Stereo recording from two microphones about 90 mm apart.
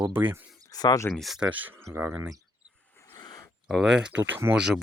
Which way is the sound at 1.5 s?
20° right (ahead or behind).